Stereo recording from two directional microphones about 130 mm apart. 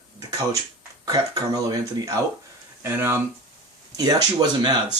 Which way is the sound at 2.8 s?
15° right (ahead or behind).